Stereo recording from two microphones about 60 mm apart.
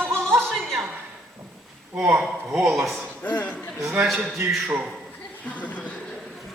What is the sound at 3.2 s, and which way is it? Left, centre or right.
Speech, left.